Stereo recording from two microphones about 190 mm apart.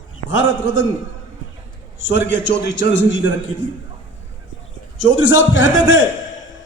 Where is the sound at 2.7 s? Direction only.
80° left.